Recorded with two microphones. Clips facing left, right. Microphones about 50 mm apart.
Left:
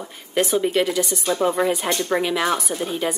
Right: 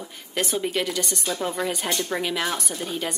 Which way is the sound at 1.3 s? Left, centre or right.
Centre.